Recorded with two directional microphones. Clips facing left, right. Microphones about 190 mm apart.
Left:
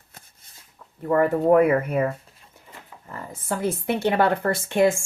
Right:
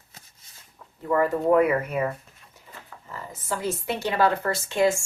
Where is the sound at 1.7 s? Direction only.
50° left (ahead or behind).